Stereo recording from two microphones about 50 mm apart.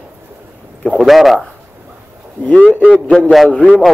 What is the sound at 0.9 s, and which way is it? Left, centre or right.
Speech, centre.